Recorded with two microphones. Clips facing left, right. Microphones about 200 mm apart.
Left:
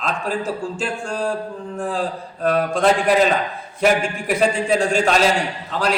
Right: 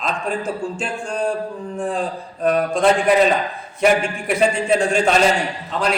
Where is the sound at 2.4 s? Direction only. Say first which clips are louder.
Right 1 dB; centre (ahead or behind).